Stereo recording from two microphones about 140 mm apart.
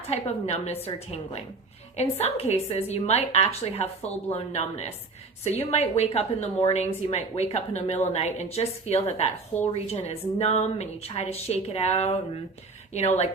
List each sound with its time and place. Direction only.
0.1 s a woman's voice: 50° left (ahead or behind)